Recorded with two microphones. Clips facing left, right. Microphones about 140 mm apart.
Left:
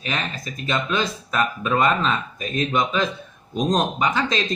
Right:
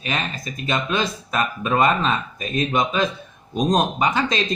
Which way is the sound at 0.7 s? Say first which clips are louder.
Right 1 dB; 20° right (ahead or behind).